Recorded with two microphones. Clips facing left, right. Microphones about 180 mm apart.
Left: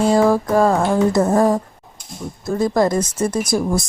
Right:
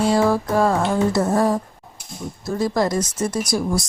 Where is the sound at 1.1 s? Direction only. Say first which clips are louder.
Left 3 dB; 50° left (ahead or behind).